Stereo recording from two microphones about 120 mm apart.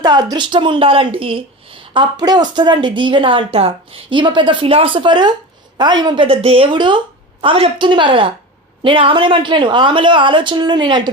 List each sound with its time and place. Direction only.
0.0 s a woman's voice: 35° right (ahead or behind)